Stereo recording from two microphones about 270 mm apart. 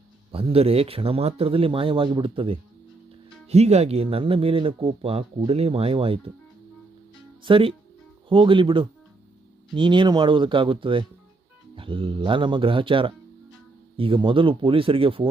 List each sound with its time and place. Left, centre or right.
0.3 s speech: right
7.4 s speech: centre